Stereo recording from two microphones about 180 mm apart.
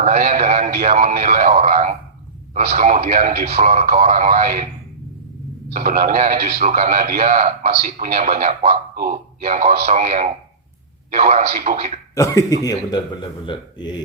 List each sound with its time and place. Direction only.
0.0 s speech: 45° right (ahead or behind)
0.4 s a sound: 40° right (ahead or behind)
0.7 s speech: 50° right (ahead or behind)
1.1 s a sound: 55° right (ahead or behind)
2.6 s a man's voice: 45° right (ahead or behind)
5.7 s a man's voice: 50° right (ahead or behind)
6.6 s a man's voice: 45° right (ahead or behind)
9.0 s a man's voice: 55° right (ahead or behind)
11.4 s a man's voice: 50° right (ahead or behind)
12.1 s a man's voice: 15° left (ahead or behind)